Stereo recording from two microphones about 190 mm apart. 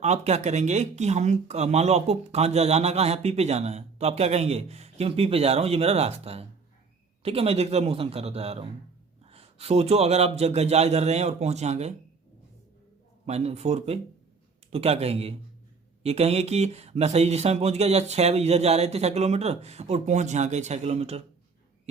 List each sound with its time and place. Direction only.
0.0 s speech: 35° right (ahead or behind)
13.2 s speech: 35° right (ahead or behind)